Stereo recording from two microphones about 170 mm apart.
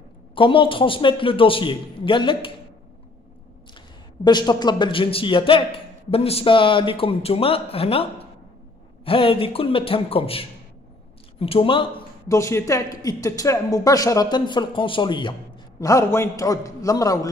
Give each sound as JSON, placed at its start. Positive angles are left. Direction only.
{"t": 0.3, "sound": "a man's voice", "side_deg": 30}
{"t": 3.7, "sound": "a man's voice", "side_deg": 25}
{"t": 12.3, "sound": "a woman's voice", "side_deg": 15}